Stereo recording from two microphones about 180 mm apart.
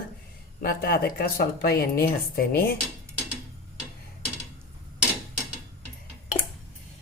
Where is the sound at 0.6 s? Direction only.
55° left (ahead or behind).